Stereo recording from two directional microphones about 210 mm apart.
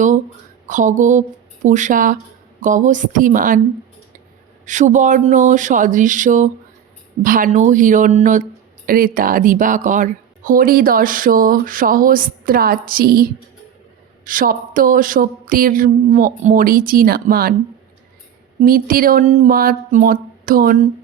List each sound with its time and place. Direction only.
0.7 s speech: 35° right (ahead or behind)
4.6 s speech: 35° right (ahead or behind)
14.3 s mantra: 40° right (ahead or behind)
18.6 s mantra: 45° right (ahead or behind)